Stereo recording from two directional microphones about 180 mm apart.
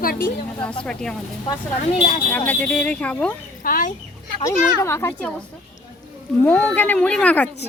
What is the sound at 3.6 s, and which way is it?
Speech, 50° left (ahead or behind).